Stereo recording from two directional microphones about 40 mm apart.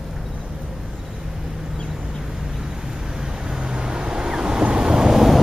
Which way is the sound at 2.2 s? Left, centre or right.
Centre.